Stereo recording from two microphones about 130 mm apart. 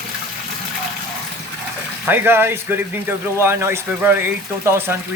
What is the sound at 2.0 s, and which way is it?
Speech, 15° right (ahead or behind).